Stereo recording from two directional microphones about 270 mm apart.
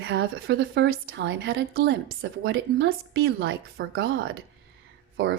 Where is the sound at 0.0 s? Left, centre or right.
Right.